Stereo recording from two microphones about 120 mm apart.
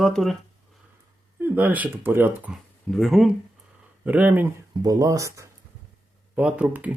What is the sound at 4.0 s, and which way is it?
Speech, 15° right (ahead or behind).